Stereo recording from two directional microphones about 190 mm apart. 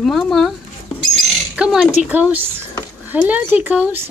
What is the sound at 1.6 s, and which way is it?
Speech, 5° right (ahead or behind).